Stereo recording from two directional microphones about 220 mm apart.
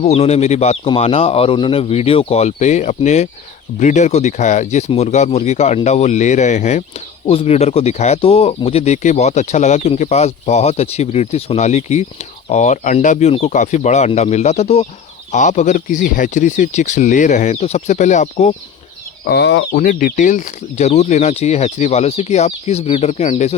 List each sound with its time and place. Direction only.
0.0 s speech: 30° left (ahead or behind)
19.2 s speech: 50° left (ahead or behind)
19.7 s speech: 40° left (ahead or behind)